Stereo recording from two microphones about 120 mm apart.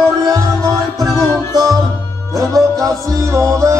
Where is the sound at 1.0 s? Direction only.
30° right (ahead or behind).